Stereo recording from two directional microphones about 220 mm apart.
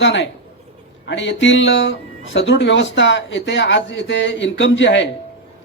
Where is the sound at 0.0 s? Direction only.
55° left (ahead or behind).